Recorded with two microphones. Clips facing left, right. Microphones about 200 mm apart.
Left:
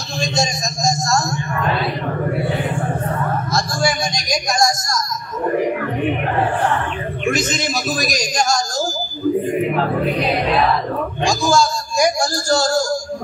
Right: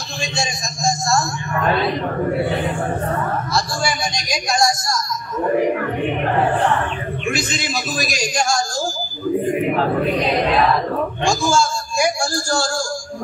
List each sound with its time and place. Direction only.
0.2 s a sound: 40° left (ahead or behind)
3.5 s a man's voice: 45° left (ahead or behind)
7.3 s a man's voice: 45° left (ahead or behind)
11.2 s a man's voice: 35° left (ahead or behind)